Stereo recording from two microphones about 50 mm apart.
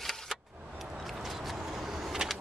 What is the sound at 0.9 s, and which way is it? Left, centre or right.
Vehicle, centre.